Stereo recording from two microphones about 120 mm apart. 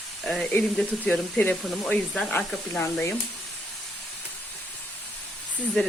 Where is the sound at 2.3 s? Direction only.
20° left (ahead or behind).